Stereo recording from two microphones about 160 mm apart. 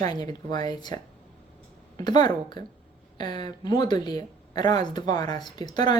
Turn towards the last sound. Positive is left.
turn(degrees=25)  # may be behind; listen again after turning